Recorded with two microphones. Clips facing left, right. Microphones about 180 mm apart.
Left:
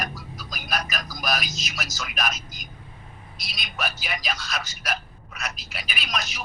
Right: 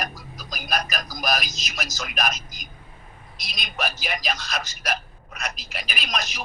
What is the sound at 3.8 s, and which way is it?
Speech, 40° right (ahead or behind).